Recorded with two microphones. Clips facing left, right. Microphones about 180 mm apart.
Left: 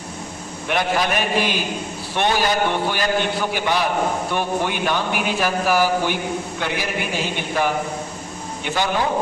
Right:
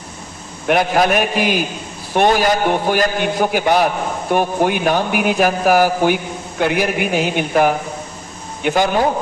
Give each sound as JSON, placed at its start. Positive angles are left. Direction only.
{"t": 0.7, "sound": "a man's voice", "side_deg": -50}